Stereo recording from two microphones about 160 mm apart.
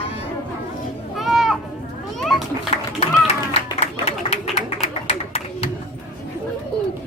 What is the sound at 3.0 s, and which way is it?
Music, 40° left (ahead or behind).